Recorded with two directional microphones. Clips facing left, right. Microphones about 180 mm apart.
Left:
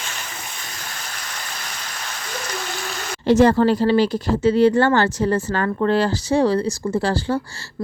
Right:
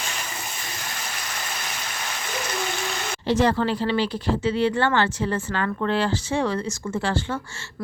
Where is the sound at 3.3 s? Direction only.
45° left (ahead or behind).